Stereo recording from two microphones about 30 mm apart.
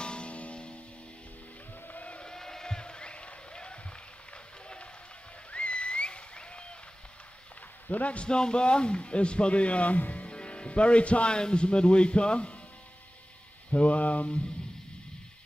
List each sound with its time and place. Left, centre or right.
0.0 s music: left
2.2 s a sound: centre
2.8 s a sound: left
5.5 s a sound: left
7.9 s mantra: left
8.3 s speech: left
9.9 s speech: left
10.2 s music: left
11.3 s speech: left
13.7 s mantra: left